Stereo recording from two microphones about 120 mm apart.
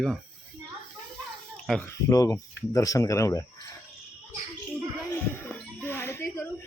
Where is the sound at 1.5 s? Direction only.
Centre (ahead or behind).